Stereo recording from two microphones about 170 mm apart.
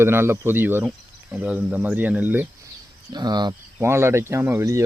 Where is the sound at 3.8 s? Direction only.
15° right (ahead or behind).